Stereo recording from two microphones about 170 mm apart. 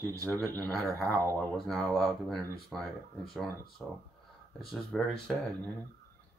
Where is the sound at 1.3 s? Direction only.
Centre (ahead or behind).